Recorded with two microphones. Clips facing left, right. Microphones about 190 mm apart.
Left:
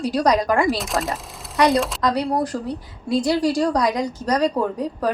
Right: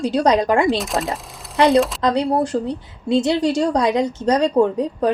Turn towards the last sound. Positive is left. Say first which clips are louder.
# right 6 dB
turn(degrees=-25)  # may be behind; listen again after turning